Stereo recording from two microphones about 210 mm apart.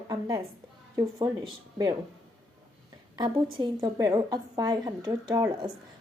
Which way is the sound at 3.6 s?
15° right (ahead or behind).